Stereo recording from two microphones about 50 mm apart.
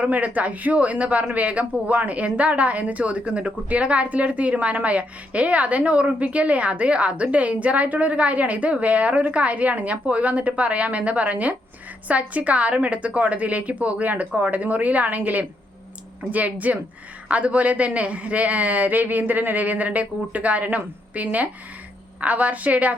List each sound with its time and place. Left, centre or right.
0.0 s speech: right